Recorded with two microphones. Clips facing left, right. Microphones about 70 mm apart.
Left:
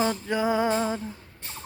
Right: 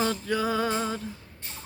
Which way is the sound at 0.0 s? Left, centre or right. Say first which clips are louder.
Left 2 dB; left.